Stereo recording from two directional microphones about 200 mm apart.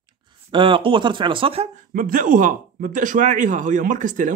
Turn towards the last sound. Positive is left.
turn(degrees=-40)  # may be behind; listen again after turning